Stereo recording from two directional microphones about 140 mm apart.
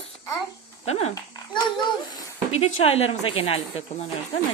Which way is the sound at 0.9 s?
50° left (ahead or behind).